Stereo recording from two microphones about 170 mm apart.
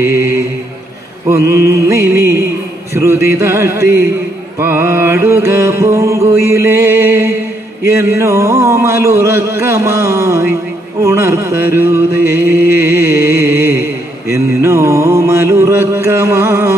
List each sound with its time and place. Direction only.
0.0 s music: 15° right (ahead or behind)